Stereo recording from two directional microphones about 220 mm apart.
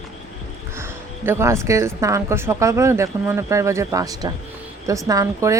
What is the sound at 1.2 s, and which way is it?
Speech, 10° right (ahead or behind).